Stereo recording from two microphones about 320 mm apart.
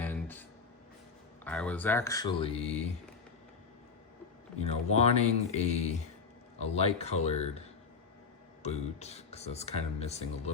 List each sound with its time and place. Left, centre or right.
0.0 s a sound: centre
1.5 s speech: centre
4.9 s speech: centre
8.6 s speech: centre